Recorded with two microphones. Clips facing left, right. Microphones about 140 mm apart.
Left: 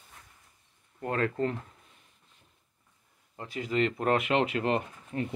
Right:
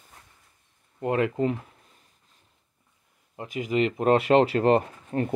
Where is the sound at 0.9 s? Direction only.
20° right (ahead or behind).